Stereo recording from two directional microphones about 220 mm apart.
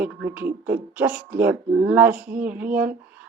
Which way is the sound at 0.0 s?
5° right (ahead or behind).